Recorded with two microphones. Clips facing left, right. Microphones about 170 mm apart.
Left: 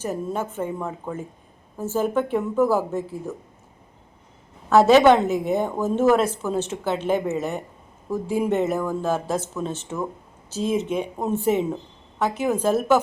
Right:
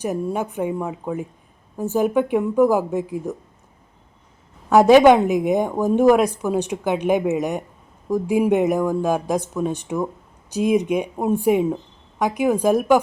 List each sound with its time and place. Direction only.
0.0 s a woman's voice: 15° right (ahead or behind)
4.7 s a woman's voice: 15° right (ahead or behind)